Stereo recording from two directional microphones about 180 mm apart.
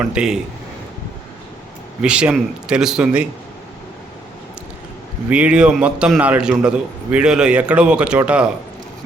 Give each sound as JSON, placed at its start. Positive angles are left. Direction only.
{"t": 0.0, "sound": "a man's voice", "side_deg": -5}
{"t": 2.0, "sound": "a man's voice", "side_deg": -5}
{"t": 5.3, "sound": "a man's voice", "side_deg": -5}